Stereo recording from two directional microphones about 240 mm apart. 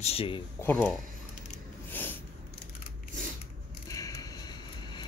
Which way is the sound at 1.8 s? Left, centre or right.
Centre.